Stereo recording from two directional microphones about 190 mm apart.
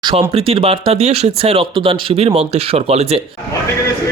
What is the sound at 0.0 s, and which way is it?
Speech, 30° right (ahead or behind).